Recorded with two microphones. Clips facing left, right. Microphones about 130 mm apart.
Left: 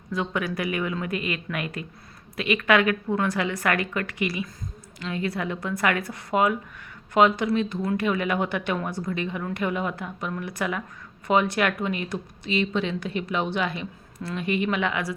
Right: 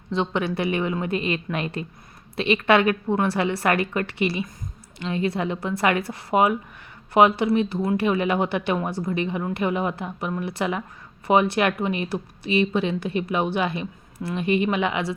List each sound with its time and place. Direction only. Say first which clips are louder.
0.1 s speech: right 3 dB; 25° right (ahead or behind)